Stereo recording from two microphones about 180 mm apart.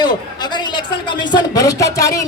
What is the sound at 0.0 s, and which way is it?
A man's voice, 25° left (ahead or behind).